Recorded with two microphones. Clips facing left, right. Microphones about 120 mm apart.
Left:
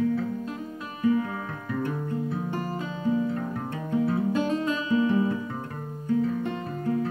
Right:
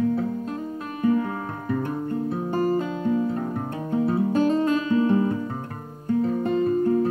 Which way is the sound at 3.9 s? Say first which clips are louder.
Right 3 dB; 40° right (ahead or behind).